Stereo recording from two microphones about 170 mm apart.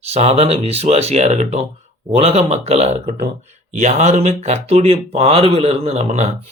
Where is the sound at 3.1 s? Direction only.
70° right (ahead or behind).